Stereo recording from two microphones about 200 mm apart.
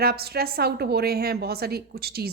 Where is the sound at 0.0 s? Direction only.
50° right (ahead or behind).